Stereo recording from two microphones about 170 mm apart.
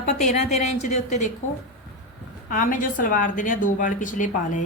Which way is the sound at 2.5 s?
50° left (ahead or behind).